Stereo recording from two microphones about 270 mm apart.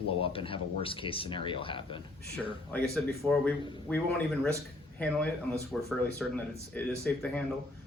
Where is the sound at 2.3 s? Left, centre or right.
Centre.